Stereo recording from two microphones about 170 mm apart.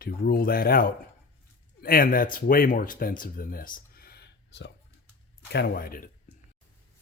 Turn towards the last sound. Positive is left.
turn(degrees=60)  # may be behind; listen again after turning